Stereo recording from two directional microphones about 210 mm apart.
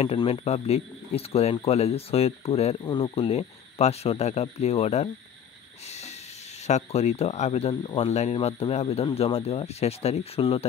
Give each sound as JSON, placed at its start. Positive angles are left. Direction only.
{"t": 0.0, "sound": "speech", "side_deg": 30}